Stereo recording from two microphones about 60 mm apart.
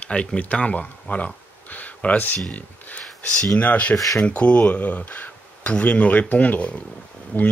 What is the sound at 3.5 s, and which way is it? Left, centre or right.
Speech, left.